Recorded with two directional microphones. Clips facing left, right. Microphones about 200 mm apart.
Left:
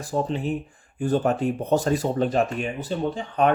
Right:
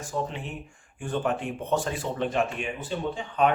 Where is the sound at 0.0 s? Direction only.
35° left (ahead or behind).